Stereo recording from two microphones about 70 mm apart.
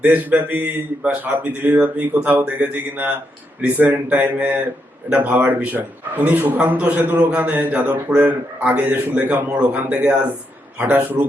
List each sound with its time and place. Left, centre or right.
0.0 s a man's voice: right